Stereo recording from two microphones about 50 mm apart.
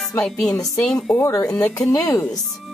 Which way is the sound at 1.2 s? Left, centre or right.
Left.